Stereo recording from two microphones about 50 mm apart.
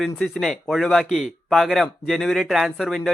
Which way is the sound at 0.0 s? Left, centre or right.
Centre.